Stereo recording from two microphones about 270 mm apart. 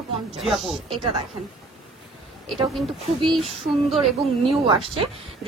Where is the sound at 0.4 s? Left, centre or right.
Centre.